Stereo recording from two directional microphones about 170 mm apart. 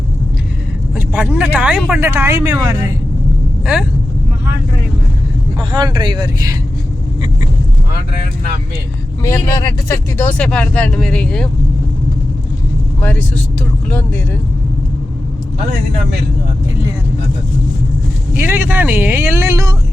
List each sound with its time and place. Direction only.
0.9 s speech: 10° right (ahead or behind)
5.5 s speech: 25° right (ahead or behind)
9.2 s speech: 20° left (ahead or behind)
13.0 s speech: 10° left (ahead or behind)
18.3 s speech: 15° right (ahead or behind)